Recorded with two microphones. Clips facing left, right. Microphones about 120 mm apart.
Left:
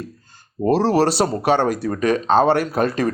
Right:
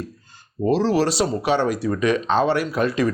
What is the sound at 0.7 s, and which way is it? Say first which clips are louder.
Speech: left 3 dB; 60° left (ahead or behind).